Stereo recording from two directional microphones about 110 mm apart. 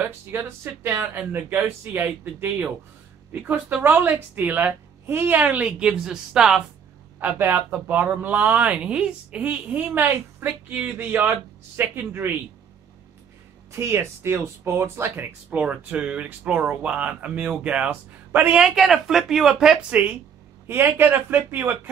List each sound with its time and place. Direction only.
0.0 s speech: 20° right (ahead or behind)
7.2 s speech: 20° right (ahead or behind)
13.7 s speech: 25° right (ahead or behind)
18.6 s speech: 5° right (ahead or behind); by 21.7 s 20° right (ahead or behind)